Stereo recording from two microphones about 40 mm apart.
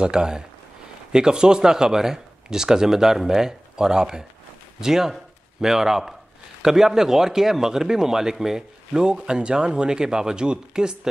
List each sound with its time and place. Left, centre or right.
0.0 s a man's voice: centre